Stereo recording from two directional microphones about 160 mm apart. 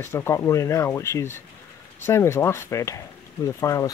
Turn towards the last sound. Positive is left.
turn(degrees=20)  # may be behind; listen again after turning